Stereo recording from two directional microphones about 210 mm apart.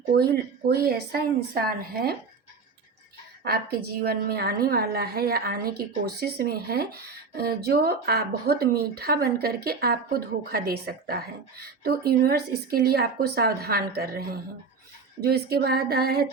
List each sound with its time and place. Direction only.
0.0 s a woman's voice: 50° right (ahead or behind)
3.4 s a woman's voice: 50° right (ahead or behind)